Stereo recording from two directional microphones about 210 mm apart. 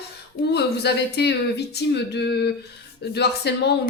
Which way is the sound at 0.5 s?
50° left (ahead or behind).